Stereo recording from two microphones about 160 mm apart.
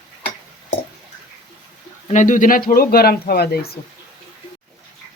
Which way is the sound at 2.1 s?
50° left (ahead or behind).